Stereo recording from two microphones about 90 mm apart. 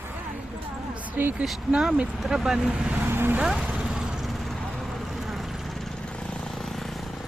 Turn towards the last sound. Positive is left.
turn(degrees=0)  # may be behind; listen again after turning